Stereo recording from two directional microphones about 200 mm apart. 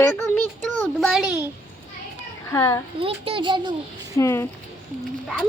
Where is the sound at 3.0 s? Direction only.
25° right (ahead or behind).